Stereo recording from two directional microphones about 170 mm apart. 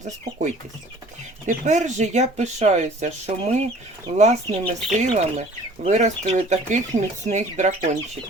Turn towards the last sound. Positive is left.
turn(degrees=-40)  # may be behind; listen again after turning